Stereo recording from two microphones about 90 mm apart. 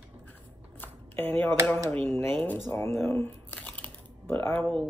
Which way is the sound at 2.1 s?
25° left (ahead or behind).